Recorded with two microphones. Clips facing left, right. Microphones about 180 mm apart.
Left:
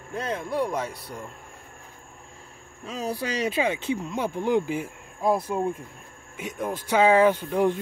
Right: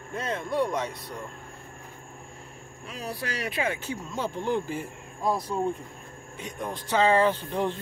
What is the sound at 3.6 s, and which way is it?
Speech, 15° left (ahead or behind).